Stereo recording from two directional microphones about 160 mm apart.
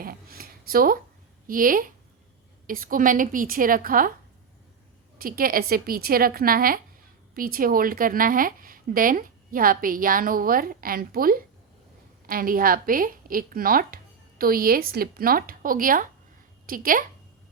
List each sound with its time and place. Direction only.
0.0 s a sound: 65° right (ahead or behind)
1.5 s a woman's voice: 60° right (ahead or behind)
5.1 s a woman's voice: 65° right (ahead or behind)